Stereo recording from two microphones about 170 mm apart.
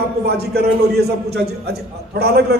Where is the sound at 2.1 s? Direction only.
70° right (ahead or behind).